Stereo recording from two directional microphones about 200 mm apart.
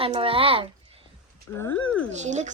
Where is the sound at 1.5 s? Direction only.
10° left (ahead or behind).